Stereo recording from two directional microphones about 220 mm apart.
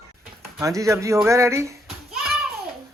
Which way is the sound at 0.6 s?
15° right (ahead or behind).